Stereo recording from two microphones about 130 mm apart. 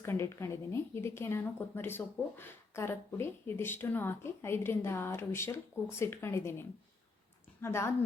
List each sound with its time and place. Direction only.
0.0 s a woman's voice: 20° left (ahead or behind)